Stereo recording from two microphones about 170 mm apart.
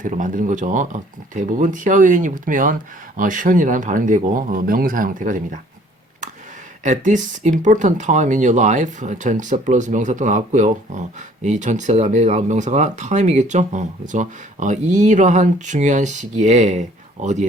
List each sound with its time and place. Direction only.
0.0 s speech: 50° right (ahead or behind)
6.8 s speech: 50° right (ahead or behind)